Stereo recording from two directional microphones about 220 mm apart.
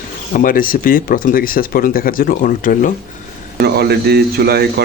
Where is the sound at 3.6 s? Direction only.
45° right (ahead or behind).